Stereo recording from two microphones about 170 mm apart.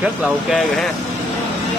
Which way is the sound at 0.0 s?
5° right (ahead or behind).